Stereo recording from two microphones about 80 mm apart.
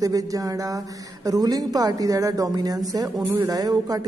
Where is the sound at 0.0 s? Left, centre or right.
Right.